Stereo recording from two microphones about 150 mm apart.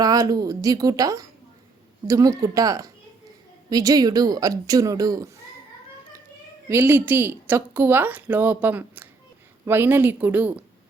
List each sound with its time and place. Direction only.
0.0 s speech: 25° right (ahead or behind)
6.7 s a woman's voice: 15° right (ahead or behind)